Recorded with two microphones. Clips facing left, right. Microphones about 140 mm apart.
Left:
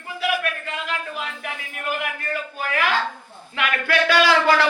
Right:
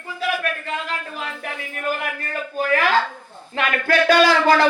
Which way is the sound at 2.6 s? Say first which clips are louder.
Right 8 dB; 35° right (ahead or behind).